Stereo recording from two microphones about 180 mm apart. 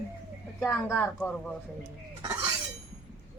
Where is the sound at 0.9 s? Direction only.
10° left (ahead or behind).